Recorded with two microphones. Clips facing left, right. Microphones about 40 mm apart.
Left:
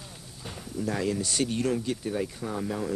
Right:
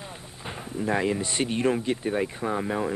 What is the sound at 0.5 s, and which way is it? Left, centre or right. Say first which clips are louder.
Speech: right 4 dB; right.